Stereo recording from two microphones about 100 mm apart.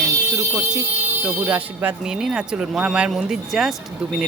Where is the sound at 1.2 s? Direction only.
15° right (ahead or behind).